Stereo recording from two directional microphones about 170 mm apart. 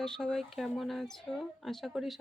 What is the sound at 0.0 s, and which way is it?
Speech, 5° left (ahead or behind).